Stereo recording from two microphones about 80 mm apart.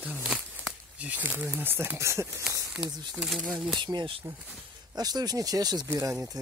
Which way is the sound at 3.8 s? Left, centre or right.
Right.